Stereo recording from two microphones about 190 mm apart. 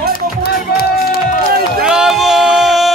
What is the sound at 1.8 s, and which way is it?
Music, 5° right (ahead or behind).